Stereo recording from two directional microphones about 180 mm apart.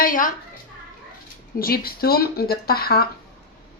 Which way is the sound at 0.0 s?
50° left (ahead or behind).